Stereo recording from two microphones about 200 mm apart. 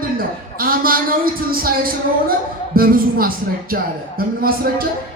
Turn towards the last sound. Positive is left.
turn(degrees=-45)  # may be behind; listen again after turning